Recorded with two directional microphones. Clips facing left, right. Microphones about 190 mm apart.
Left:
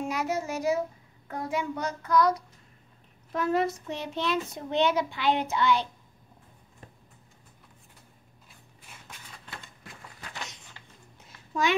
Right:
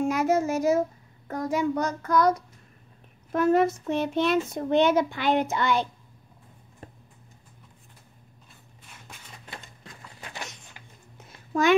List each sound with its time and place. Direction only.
0.1 s a child's voice: 45° right (ahead or behind)
3.3 s a child's voice: 50° right (ahead or behind)
10.8 s music: 15° right (ahead or behind)